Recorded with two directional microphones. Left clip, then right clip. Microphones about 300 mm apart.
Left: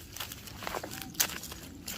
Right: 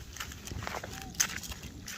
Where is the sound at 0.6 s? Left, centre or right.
Left.